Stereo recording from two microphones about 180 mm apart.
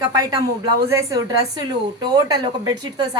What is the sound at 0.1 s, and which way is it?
A woman's voice, 20° right (ahead or behind).